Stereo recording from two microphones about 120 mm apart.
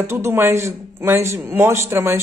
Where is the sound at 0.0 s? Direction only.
20° right (ahead or behind).